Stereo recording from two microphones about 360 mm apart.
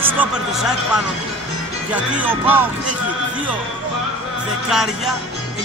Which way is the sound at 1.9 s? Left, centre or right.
Centre.